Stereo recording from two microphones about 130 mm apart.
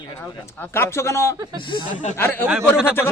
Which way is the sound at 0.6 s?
20° left (ahead or behind).